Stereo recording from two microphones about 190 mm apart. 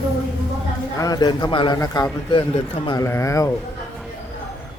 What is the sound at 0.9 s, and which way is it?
A man's voice, 20° left (ahead or behind).